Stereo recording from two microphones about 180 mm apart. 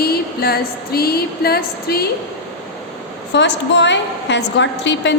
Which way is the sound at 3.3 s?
75° left (ahead or behind).